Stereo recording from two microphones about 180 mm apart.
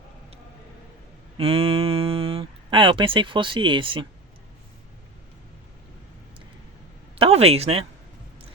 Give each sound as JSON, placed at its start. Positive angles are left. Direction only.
{"t": 1.4, "sound": "speech", "side_deg": -30}
{"t": 7.2, "sound": "speech", "side_deg": -35}